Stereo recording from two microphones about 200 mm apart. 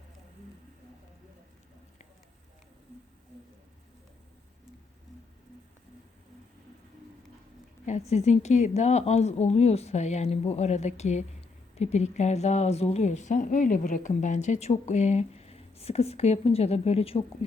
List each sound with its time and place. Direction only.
7.9 s speech: 35° left (ahead or behind)